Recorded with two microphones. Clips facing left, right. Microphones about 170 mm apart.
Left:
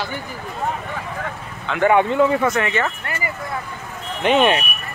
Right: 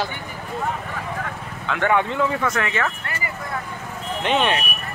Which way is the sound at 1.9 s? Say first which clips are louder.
Left 6 dB; 15° left (ahead or behind).